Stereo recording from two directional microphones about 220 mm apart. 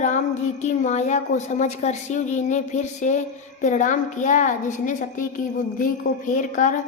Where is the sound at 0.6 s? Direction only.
35° left (ahead or behind).